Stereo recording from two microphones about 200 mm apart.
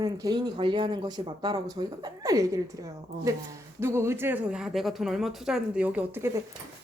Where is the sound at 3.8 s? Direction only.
15° right (ahead or behind).